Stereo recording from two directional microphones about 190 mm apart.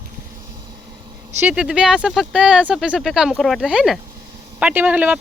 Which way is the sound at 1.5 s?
5° right (ahead or behind).